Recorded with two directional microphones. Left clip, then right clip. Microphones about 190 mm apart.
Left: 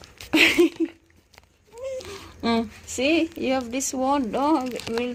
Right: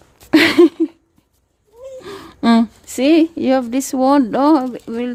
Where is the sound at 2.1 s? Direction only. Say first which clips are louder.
Right 11 dB; 65° right (ahead or behind).